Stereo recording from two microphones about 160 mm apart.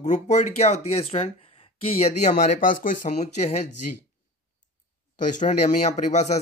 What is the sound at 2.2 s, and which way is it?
A man's voice, 55° left (ahead or behind).